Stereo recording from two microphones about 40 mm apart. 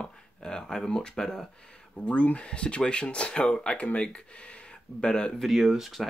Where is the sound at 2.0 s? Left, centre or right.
Left.